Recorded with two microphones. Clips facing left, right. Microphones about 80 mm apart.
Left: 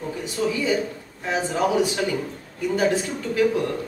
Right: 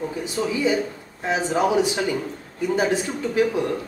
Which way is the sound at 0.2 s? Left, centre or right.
Centre.